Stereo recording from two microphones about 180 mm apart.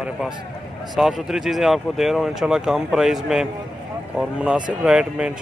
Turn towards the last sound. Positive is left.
turn(degrees=-5)  # may be behind; listen again after turning